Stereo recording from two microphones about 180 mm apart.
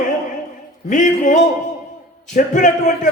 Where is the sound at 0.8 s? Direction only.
45° left (ahead or behind).